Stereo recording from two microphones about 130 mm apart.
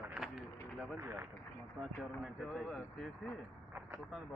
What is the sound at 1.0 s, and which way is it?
Speech, 20° right (ahead or behind).